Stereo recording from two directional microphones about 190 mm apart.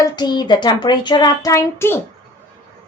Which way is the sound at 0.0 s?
20° left (ahead or behind).